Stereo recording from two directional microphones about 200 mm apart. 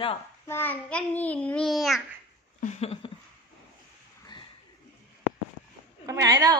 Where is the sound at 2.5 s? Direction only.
35° left (ahead or behind).